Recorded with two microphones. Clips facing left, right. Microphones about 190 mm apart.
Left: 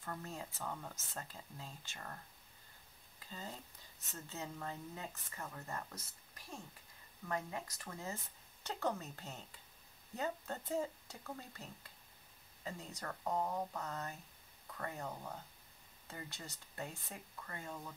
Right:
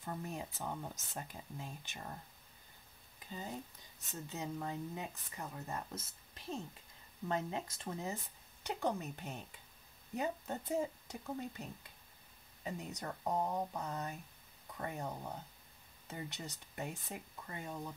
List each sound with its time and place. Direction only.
0.0 s speech: 15° right (ahead or behind)
3.3 s speech: 15° right (ahead or behind)